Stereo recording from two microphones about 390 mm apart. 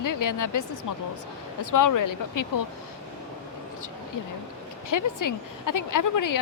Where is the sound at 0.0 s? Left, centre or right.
Left.